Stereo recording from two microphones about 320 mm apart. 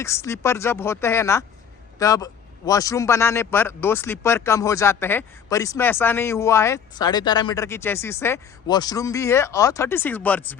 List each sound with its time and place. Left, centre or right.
0.0 s speech: centre